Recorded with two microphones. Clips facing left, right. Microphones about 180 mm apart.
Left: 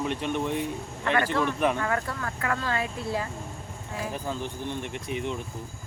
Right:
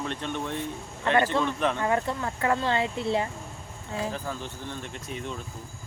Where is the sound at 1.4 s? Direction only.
10° left (ahead or behind).